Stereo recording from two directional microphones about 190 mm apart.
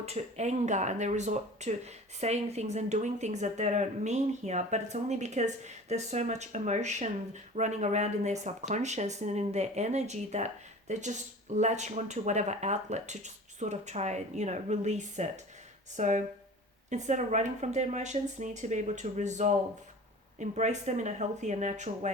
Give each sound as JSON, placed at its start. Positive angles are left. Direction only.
{"t": 0.0, "sound": "speech", "side_deg": -35}